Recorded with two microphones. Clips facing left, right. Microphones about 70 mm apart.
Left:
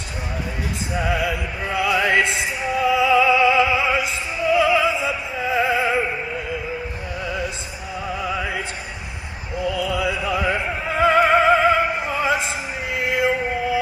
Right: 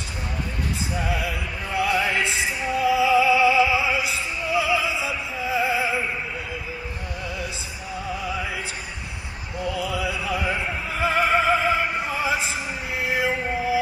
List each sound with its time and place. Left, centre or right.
0.9 s music: left
7.2 s music: left
9.8 s opera: left
12.9 s music: left